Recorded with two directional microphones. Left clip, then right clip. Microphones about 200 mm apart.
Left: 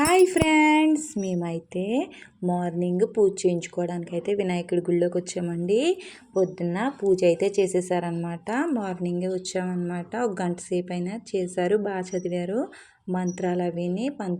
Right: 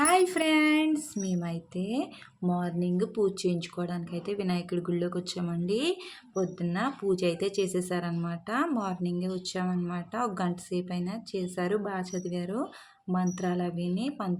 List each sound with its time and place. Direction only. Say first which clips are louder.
0.0 s a sound: left 5 dB; 15° left (ahead or behind)
1.2 s speech: left 6 dB; 15° left (ahead or behind)
4.4 s speech: left 6 dB; 30° right (ahead or behind)
4.7 s speech: left 11 dB; 10° left (ahead or behind)